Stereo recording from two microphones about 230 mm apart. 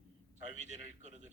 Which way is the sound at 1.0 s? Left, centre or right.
Right.